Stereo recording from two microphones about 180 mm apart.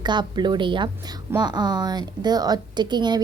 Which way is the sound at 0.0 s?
25° right (ahead or behind).